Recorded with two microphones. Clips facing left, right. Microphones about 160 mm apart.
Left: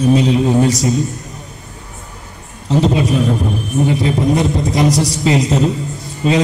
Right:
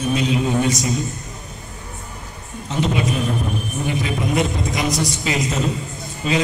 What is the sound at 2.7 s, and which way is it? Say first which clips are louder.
Speech: left 7 dB; 35° left (ahead or behind).